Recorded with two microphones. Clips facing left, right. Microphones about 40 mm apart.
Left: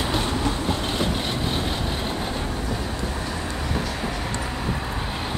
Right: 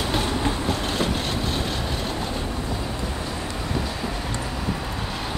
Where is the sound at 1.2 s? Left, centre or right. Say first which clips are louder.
Even; left.